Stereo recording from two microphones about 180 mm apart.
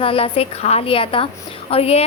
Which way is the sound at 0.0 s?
30° left (ahead or behind).